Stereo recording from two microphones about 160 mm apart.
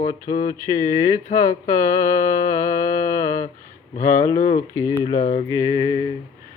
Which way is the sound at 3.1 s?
55° left (ahead or behind).